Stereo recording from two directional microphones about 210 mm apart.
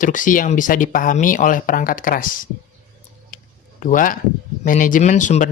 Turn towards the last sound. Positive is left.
turn(degrees=35)  # may be behind; listen again after turning